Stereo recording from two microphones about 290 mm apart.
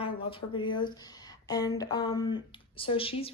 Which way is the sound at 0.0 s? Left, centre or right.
Centre.